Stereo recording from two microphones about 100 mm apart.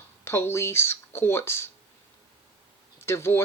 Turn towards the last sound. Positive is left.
turn(degrees=25)  # may be behind; listen again after turning